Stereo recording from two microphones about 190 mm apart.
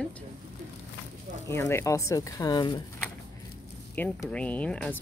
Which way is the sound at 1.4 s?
15° left (ahead or behind).